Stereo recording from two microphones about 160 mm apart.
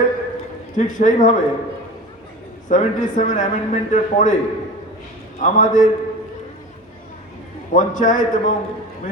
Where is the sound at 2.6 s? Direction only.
55° left (ahead or behind).